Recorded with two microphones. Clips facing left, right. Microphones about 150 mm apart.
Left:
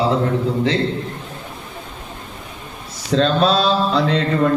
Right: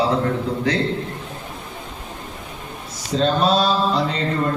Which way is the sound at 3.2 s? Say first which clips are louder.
Left 1 dB; 75° left (ahead or behind).